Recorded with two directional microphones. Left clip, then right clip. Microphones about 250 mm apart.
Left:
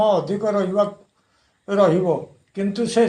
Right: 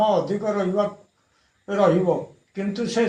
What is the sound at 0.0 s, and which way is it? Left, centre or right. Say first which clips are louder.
Speech: left 2 dB; left.